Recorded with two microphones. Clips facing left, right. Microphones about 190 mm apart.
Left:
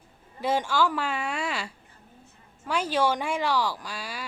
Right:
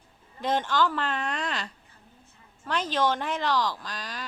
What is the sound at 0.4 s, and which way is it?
Speech, 10° left (ahead or behind).